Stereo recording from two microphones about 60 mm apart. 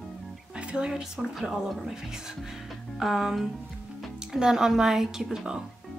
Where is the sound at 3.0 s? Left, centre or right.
Centre.